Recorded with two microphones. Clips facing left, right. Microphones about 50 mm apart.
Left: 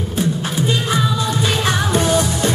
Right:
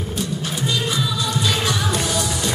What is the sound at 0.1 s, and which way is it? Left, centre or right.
Music, left.